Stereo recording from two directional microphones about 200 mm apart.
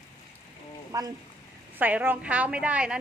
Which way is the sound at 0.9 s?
15° right (ahead or behind).